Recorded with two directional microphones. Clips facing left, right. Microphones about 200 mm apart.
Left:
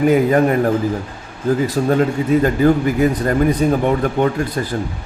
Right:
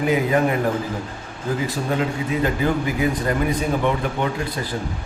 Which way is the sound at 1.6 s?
45° left (ahead or behind).